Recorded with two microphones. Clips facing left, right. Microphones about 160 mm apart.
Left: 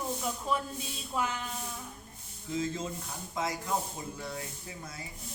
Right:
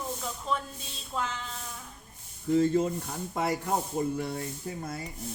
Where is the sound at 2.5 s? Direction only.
60° right (ahead or behind).